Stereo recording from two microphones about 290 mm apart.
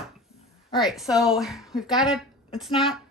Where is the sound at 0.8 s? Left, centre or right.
Centre.